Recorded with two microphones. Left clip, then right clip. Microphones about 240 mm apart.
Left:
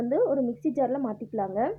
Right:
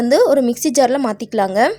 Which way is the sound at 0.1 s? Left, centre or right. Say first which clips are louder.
Right 13 dB; right.